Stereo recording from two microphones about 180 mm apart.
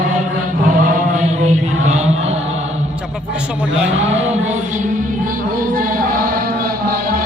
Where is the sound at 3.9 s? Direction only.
35° right (ahead or behind).